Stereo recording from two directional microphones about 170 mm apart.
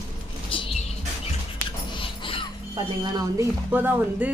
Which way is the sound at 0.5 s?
30° left (ahead or behind).